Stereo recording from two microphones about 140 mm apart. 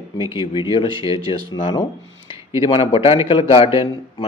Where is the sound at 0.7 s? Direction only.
40° left (ahead or behind).